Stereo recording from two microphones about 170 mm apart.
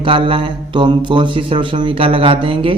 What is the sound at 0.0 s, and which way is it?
Speech, 30° right (ahead or behind).